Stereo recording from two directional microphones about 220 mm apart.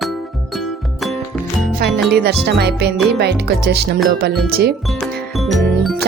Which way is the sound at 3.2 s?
50° right (ahead or behind).